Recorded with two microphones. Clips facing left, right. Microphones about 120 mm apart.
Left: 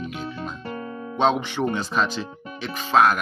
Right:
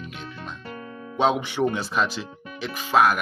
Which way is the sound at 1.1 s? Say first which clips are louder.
Even; 10° right (ahead or behind).